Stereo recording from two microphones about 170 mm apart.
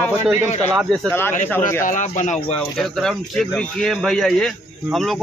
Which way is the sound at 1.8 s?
50° left (ahead or behind).